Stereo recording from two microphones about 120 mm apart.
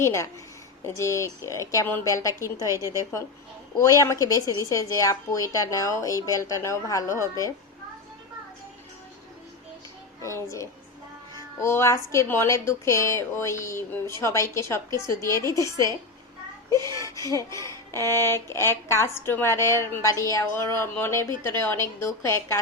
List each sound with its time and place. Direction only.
0.0 s speech: 25° left (ahead or behind)
3.8 s speech: 25° left (ahead or behind)
10.2 s speech: 25° left (ahead or behind)